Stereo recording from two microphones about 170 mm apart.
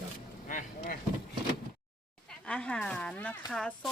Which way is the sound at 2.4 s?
5° left (ahead or behind).